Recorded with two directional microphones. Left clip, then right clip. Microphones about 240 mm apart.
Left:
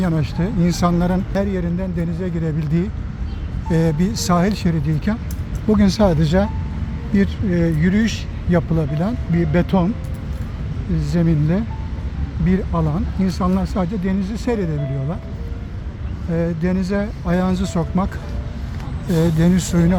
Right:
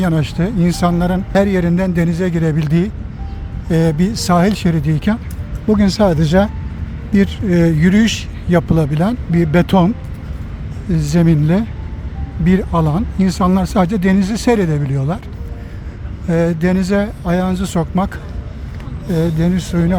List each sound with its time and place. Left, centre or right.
0.0 s speech: centre
1.3 s speech: right
10.9 s speech: centre
16.3 s speech: centre
19.1 s speech: centre